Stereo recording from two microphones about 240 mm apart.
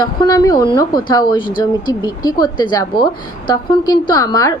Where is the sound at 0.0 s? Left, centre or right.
Centre.